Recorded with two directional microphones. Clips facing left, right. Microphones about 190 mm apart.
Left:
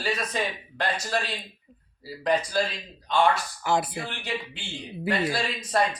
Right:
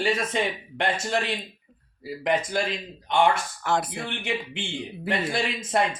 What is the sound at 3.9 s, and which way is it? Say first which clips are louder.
Speech: right 2 dB; 25° right (ahead or behind).